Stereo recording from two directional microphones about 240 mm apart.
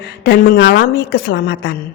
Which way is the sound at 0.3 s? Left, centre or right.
Left.